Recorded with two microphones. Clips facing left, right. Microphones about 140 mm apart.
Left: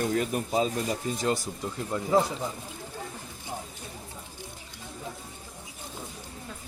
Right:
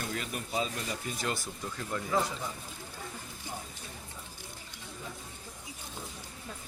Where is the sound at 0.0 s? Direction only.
40° left (ahead or behind); by 2.2 s 25° left (ahead or behind).